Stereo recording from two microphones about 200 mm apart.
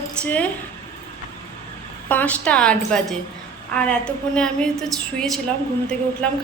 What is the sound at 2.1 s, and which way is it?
A woman's voice, 10° left (ahead or behind).